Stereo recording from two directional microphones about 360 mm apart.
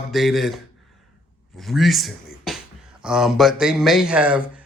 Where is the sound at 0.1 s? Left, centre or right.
Centre.